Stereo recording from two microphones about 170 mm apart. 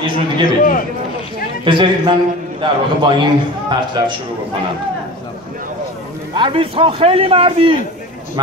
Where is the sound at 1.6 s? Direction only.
30° right (ahead or behind).